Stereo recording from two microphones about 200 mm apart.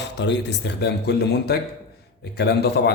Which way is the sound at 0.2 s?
60° left (ahead or behind).